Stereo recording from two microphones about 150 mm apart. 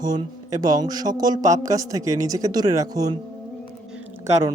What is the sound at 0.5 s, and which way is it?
Speech, 25° right (ahead or behind).